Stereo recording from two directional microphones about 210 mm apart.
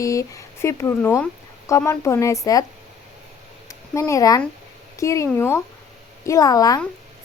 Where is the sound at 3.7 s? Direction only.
15° left (ahead or behind).